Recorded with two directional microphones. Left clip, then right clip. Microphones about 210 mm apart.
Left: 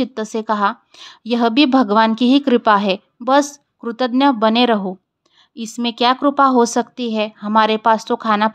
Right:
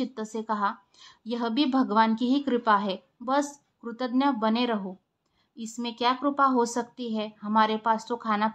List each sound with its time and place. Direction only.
0.0 s a woman's voice: 35° left (ahead or behind)